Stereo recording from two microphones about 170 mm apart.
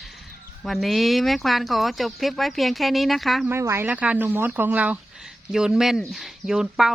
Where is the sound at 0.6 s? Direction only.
Centre (ahead or behind).